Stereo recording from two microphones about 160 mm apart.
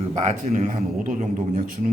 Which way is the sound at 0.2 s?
50° right (ahead or behind).